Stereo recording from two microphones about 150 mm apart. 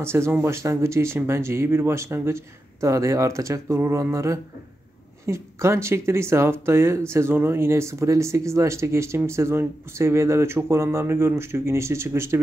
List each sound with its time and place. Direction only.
0.0 s speech: 15° right (ahead or behind)